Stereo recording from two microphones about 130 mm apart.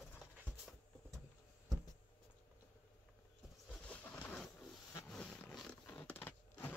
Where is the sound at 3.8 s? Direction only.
10° left (ahead or behind).